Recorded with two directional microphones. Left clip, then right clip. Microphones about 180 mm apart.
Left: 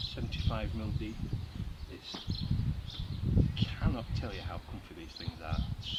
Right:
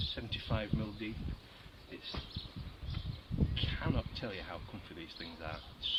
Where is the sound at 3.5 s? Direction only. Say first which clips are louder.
Even; 20° right (ahead or behind).